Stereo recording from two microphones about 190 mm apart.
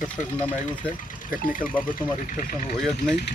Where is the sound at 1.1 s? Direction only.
45° left (ahead or behind).